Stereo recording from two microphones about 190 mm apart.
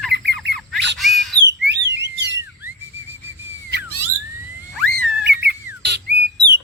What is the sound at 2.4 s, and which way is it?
Whistle, 10° right (ahead or behind).